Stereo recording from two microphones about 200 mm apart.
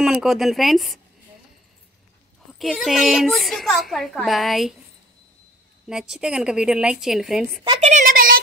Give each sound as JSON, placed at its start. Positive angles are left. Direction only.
{"t": 0.0, "sound": "a woman's voice", "side_deg": 0}
{"t": 2.6, "sound": "a woman's voice", "side_deg": 0}
{"t": 5.9, "sound": "a woman's voice", "side_deg": -5}
{"t": 7.6, "sound": "a woman's voice", "side_deg": -30}